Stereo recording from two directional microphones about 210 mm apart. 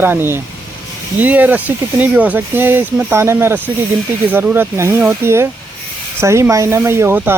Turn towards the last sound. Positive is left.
turn(degrees=-10)  # may be behind; listen again after turning